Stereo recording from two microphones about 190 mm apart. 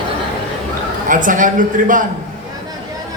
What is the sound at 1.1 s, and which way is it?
Speech, 45° right (ahead or behind).